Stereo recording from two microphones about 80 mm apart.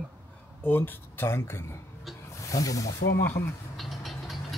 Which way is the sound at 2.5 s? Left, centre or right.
Left.